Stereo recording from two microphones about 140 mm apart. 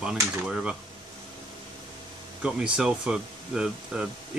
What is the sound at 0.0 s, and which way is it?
Speech, 5° right (ahead or behind).